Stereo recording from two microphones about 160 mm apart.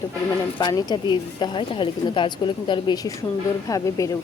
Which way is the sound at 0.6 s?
25° left (ahead or behind).